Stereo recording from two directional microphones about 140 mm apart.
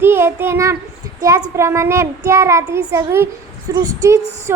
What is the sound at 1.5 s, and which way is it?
A child's voice, 20° right (ahead or behind).